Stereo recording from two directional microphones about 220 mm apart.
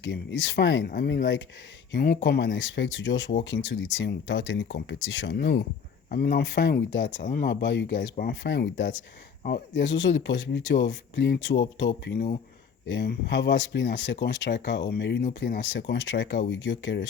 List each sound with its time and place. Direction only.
0.0 s speech: 55° left (ahead or behind)
6.1 s speech: 40° left (ahead or behind)
7.3 s speech: 45° left (ahead or behind)
8.1 s speech: 40° left (ahead or behind); by 17.1 s 55° left (ahead or behind)